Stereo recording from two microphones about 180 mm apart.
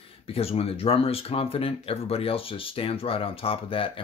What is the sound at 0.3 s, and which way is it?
Speech, 35° left (ahead or behind).